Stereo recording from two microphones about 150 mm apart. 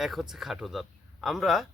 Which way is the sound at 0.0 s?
Centre (ahead or behind).